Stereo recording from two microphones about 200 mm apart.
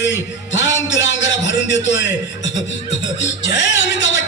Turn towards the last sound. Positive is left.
turn(degrees=65)  # may be behind; listen again after turning